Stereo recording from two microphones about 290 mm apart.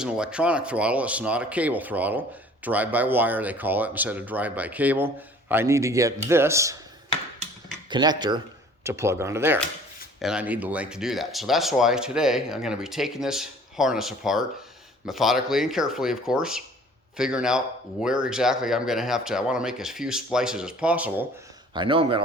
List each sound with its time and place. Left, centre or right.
0.0 s speech: centre
7.9 s speech: centre
21.8 s speech: centre